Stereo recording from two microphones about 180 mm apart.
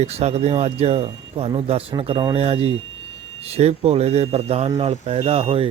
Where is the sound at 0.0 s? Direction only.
35° right (ahead or behind).